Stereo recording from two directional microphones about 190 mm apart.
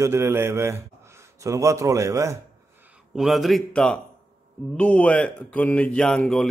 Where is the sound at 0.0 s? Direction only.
15° right (ahead or behind).